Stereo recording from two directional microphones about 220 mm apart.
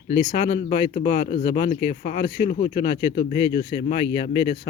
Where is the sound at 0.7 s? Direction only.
40° left (ahead or behind).